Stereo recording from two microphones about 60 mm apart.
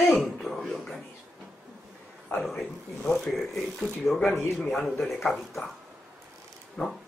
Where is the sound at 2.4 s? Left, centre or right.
Centre.